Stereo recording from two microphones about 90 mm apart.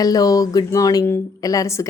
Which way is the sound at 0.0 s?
45° left (ahead or behind).